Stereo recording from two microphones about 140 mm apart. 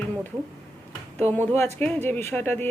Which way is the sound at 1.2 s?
15° left (ahead or behind).